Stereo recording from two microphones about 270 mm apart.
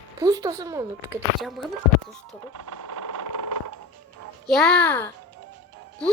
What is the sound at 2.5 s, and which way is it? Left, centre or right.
Vehicle, right.